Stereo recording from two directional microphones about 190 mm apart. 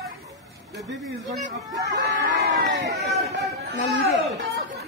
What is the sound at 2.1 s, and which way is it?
Speech, 75° right (ahead or behind).